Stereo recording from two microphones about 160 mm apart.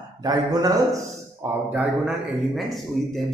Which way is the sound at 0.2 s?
25° right (ahead or behind).